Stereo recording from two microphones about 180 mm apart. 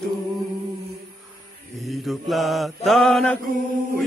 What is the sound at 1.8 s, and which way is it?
Chant, centre (ahead or behind).